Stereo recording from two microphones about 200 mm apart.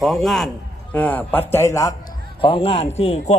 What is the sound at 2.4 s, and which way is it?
Speech, 25° left (ahead or behind).